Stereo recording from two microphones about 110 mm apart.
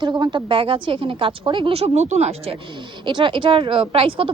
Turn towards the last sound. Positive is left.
turn(degrees=-55)  # may be behind; listen again after turning